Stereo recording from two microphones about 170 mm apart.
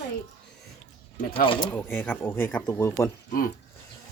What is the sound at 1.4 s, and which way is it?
Speech, 30° left (ahead or behind).